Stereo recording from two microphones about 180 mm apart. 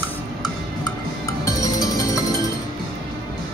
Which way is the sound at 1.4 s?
20° left (ahead or behind).